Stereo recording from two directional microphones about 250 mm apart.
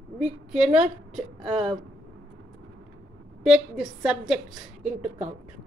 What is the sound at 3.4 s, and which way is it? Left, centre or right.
Speech, centre.